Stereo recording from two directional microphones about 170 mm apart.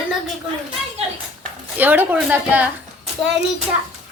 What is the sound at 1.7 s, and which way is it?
Speech, 10° right (ahead or behind).